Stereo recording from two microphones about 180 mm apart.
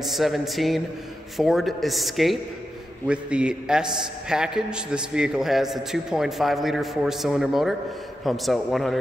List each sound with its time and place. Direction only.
0.0 s a man's voice: centre (ahead or behind)